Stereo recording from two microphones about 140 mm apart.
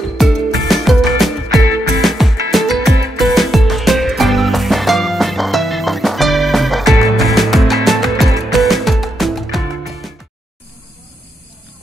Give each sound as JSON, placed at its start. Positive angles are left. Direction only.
{"t": 0.2, "sound": "music", "side_deg": 0}